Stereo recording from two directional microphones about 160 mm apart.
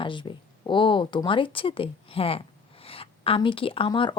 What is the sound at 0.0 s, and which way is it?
Speech, 30° left (ahead or behind).